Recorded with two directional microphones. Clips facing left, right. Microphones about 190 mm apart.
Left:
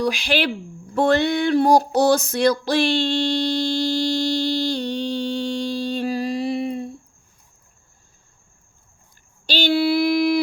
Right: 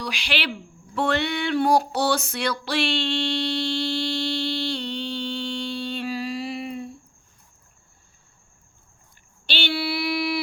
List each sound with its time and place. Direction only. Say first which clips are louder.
0.0 s speech: left 8 dB; 45° left (ahead or behind)
0.9 s a sound: left 6 dB; 40° left (ahead or behind)
9.5 s female singing: left 8 dB; 40° left (ahead or behind)